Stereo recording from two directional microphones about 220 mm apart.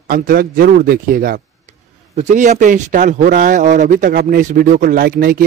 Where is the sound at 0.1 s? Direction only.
40° right (ahead or behind).